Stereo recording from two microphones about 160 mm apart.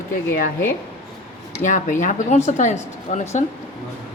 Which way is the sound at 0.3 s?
60° left (ahead or behind).